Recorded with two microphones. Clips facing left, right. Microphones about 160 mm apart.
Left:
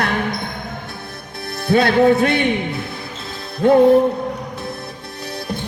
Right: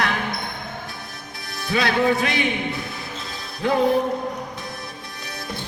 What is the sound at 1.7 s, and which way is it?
Music, 55° left (ahead or behind).